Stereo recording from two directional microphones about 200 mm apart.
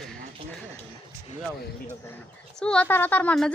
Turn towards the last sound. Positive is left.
turn(degrees=5)  # may be behind; listen again after turning